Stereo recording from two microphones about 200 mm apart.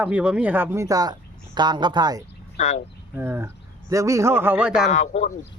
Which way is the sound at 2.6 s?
35° left (ahead or behind).